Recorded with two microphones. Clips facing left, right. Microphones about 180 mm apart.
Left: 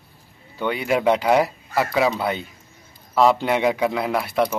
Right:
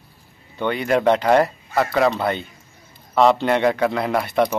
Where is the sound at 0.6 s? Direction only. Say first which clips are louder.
Right 2 dB; 5° left (ahead or behind).